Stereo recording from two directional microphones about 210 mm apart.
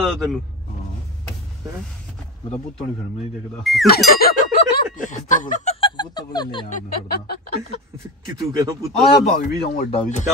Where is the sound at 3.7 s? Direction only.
Centre (ahead or behind).